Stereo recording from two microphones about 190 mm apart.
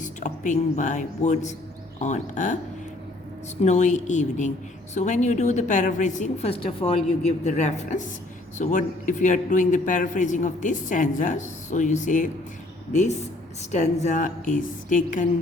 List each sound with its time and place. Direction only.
0.0 s a man's voice: 40° left (ahead or behind)
3.6 s a man's voice: 40° left (ahead or behind)